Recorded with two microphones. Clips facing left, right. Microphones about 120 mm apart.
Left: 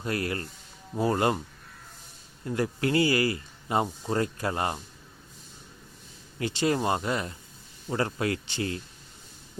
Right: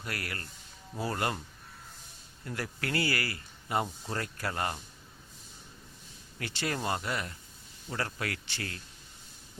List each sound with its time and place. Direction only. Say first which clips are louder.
0.0 s speech: left 9 dB; 25° left (ahead or behind)
2.4 s speech: left 9 dB; 20° left (ahead or behind)
6.4 s speech: left 8 dB; 20° left (ahead or behind)